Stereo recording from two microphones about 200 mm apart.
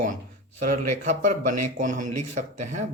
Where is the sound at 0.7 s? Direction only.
40° right (ahead or behind).